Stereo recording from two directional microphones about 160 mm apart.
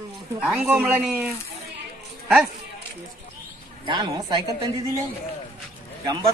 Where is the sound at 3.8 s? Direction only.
30° right (ahead or behind).